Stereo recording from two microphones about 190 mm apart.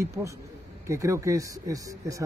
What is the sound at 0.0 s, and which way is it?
Speech, 15° right (ahead or behind).